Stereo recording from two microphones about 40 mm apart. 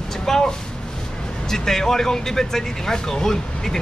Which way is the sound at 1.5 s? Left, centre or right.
Centre.